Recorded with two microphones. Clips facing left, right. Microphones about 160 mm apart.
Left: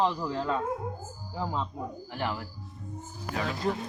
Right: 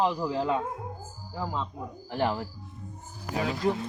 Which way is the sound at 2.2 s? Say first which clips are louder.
Right 6 dB; 30° right (ahead or behind).